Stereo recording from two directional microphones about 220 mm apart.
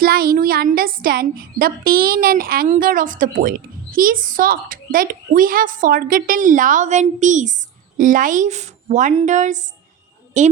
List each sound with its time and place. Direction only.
0.0 s a woman's voice: 40° right (ahead or behind)